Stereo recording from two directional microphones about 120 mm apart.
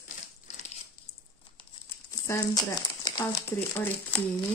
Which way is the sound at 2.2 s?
30° left (ahead or behind).